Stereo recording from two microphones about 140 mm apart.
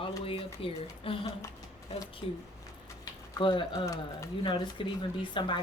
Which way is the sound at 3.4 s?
35° left (ahead or behind).